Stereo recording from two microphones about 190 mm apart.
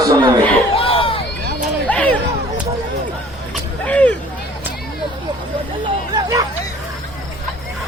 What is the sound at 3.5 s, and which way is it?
Vehicle, 5° left (ahead or behind).